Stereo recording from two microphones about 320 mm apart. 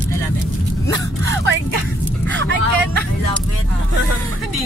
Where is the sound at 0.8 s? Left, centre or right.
Centre.